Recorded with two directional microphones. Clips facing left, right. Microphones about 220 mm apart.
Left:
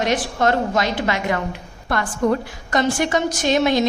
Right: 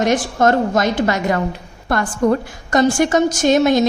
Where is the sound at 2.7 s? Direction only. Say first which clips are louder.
Right 5 dB; 45° right (ahead or behind).